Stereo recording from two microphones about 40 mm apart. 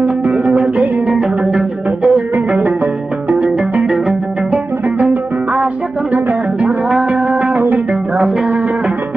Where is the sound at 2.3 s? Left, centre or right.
Right.